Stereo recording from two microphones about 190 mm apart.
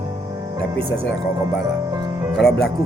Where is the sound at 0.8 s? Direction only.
30° right (ahead or behind).